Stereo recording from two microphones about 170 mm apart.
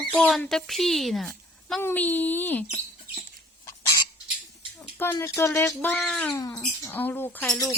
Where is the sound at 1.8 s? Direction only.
10° left (ahead or behind).